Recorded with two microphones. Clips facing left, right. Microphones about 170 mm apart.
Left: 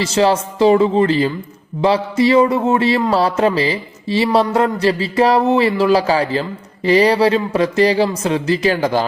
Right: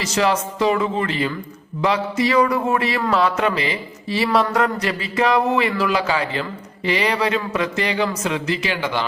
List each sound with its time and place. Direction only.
0.0 s speech: 30° left (ahead or behind)